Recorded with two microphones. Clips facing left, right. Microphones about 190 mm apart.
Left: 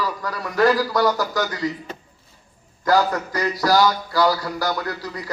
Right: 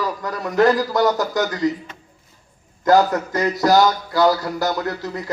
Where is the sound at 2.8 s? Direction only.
20° right (ahead or behind).